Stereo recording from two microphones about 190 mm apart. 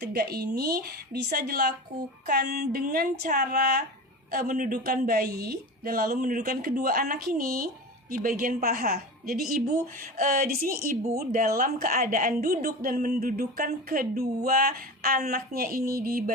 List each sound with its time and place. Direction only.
0.0 s a woman's voice: 55° right (ahead or behind)